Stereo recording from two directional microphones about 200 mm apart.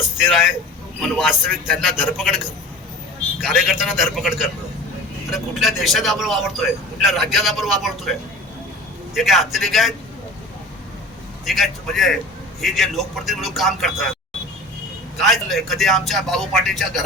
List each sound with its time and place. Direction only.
0.0 s a man's voice: centre (ahead or behind)
3.4 s a man's voice: centre (ahead or behind)
9.1 s a man's voice: centre (ahead or behind)
11.4 s a man's voice: centre (ahead or behind)
15.2 s a man's voice: centre (ahead or behind)